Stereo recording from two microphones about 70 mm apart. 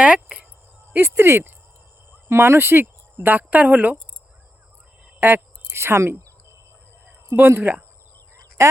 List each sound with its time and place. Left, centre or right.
0.0 s cricket: centre
0.9 s speech: right
5.2 s speech: right
7.3 s speech: right